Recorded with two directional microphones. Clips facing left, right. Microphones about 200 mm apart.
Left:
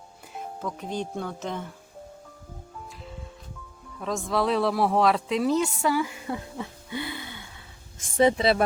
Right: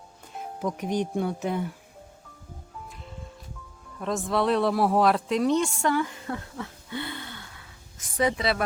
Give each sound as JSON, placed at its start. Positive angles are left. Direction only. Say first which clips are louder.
{"t": 0.6, "sound": "speech", "louder": "right 5 dB", "side_deg": -15}
{"t": 4.0, "sound": "speech", "louder": "right 1 dB", "side_deg": 0}
{"t": 7.9, "sound": "speech", "louder": "left 5 dB", "side_deg": 25}